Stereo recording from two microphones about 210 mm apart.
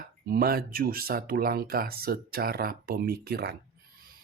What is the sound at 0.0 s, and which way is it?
Speech, 45° right (ahead or behind).